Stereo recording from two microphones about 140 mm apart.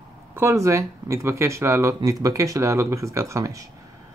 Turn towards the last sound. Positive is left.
turn(degrees=-20)  # may be behind; listen again after turning